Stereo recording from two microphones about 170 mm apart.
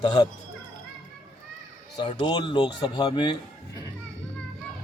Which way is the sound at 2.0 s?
30° left (ahead or behind).